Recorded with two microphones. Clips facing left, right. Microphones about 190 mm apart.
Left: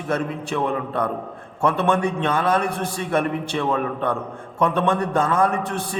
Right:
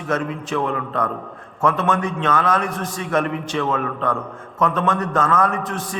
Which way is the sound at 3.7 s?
35° left (ahead or behind).